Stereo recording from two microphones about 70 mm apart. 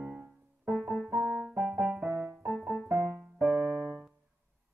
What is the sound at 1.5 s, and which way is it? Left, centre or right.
Music, right.